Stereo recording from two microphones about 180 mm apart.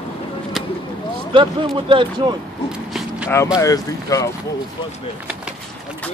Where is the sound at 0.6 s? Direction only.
Centre (ahead or behind).